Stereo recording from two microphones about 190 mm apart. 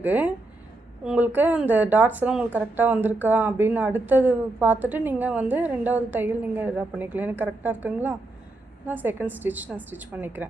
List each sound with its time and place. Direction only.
0.0 s speech: 10° right (ahead or behind)